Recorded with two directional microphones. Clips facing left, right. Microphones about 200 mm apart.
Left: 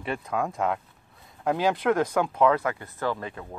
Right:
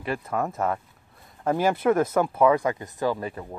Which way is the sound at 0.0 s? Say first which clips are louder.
Right 1 dB; centre (ahead or behind).